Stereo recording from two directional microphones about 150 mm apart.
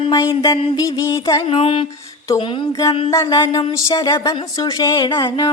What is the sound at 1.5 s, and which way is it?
Music, 40° left (ahead or behind).